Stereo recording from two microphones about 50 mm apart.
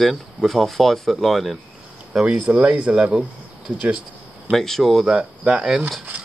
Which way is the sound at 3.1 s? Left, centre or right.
Centre.